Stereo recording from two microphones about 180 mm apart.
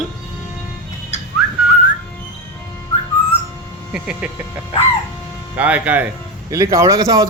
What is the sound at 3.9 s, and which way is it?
Speech, 5° right (ahead or behind).